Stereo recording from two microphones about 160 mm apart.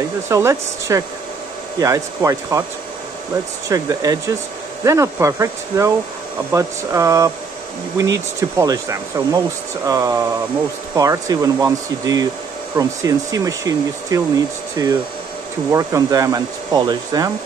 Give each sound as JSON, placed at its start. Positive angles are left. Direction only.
{"t": 0.3, "sound": "speech", "side_deg": -20}
{"t": 3.6, "sound": "speech", "side_deg": -20}